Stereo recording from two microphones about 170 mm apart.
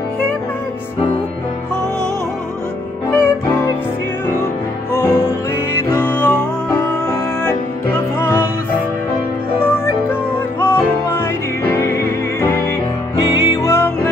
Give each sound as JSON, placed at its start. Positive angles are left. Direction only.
{"t": 3.1, "sound": "music", "side_deg": 15}
{"t": 4.9, "sound": "music", "side_deg": 15}
{"t": 8.2, "sound": "music", "side_deg": 15}
{"t": 9.6, "sound": "music", "side_deg": 15}